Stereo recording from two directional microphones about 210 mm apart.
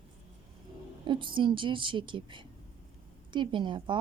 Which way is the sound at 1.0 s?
25° right (ahead or behind).